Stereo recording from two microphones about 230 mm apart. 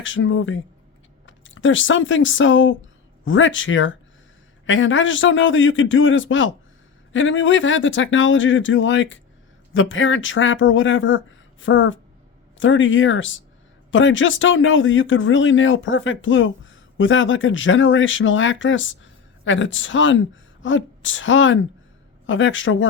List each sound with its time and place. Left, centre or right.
0.0 s speech: left